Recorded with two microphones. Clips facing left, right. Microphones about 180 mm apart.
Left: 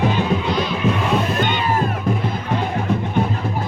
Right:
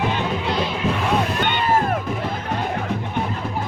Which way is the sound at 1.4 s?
55° right (ahead or behind).